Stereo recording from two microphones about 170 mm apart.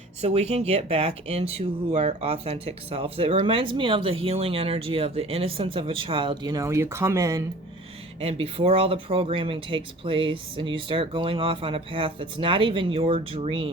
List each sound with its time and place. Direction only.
0.2 s speech: 40° right (ahead or behind); by 7.4 s 20° right (ahead or behind)
8.2 s speech: 35° right (ahead or behind)